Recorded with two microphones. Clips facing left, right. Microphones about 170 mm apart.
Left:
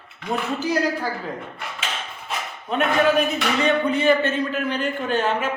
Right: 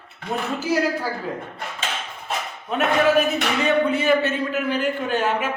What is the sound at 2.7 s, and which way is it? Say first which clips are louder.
A man's voice: even; 5° right (ahead or behind).